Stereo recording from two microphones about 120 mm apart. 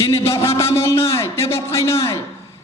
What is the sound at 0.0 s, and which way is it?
Speech, 20° left (ahead or behind).